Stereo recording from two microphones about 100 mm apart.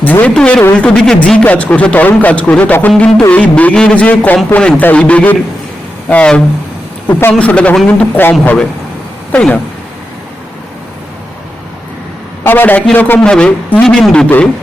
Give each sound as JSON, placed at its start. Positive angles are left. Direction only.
{"t": 0.0, "sound": "speech", "side_deg": 15}
{"t": 7.1, "sound": "speech", "side_deg": 25}
{"t": 7.3, "sound": "speech", "side_deg": 10}
{"t": 12.4, "sound": "speech", "side_deg": 20}